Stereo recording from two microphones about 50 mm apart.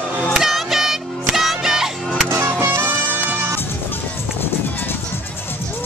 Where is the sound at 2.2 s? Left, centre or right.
Right.